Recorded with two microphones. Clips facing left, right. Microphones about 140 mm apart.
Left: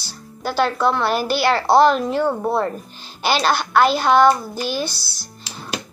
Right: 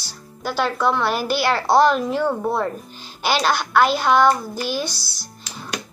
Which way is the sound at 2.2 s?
10° left (ahead or behind).